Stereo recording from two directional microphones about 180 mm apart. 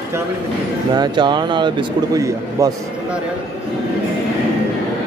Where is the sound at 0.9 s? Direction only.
25° right (ahead or behind).